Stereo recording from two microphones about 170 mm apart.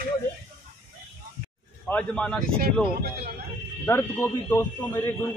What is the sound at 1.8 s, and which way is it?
Speech, 5° left (ahead or behind).